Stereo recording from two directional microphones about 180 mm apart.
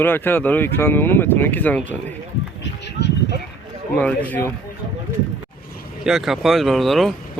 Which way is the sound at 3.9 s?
5° left (ahead or behind).